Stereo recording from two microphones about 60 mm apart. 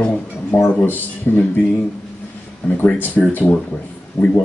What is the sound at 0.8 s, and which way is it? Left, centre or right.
Speech, left.